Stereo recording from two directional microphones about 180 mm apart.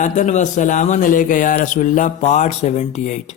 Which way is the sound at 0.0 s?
45° left (ahead or behind).